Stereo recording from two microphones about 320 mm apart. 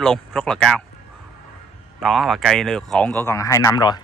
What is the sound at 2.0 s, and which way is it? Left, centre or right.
Speech, centre.